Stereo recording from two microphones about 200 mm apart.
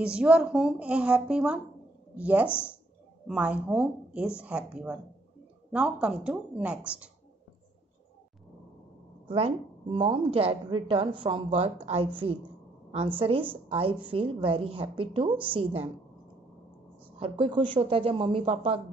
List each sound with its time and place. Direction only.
0.0 s a woman's voice: 5° right (ahead or behind)
9.3 s a woman's voice: 25° right (ahead or behind)
17.2 s a woman's voice: 25° right (ahead or behind)